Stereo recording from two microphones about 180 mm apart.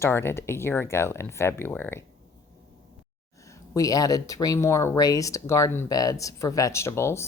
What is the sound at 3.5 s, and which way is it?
Speech, 20° left (ahead or behind).